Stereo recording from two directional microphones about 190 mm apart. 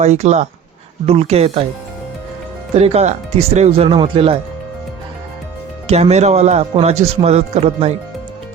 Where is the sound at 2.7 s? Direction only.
35° right (ahead or behind).